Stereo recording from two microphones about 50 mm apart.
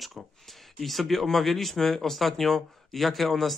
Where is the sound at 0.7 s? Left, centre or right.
Centre.